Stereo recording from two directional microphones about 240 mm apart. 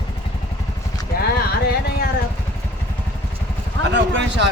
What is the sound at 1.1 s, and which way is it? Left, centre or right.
Clip-clop, left.